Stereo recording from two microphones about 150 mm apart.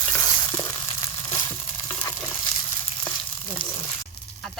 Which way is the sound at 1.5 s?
15° left (ahead or behind).